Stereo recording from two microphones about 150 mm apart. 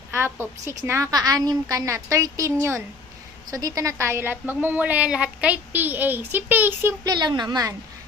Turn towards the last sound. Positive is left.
turn(degrees=-25)  # may be behind; listen again after turning